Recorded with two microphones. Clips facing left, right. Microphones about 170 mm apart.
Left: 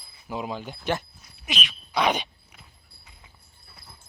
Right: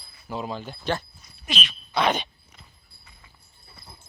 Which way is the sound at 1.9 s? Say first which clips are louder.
Even; 10° left (ahead or behind).